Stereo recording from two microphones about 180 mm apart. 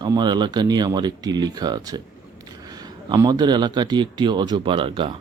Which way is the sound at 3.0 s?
20° right (ahead or behind).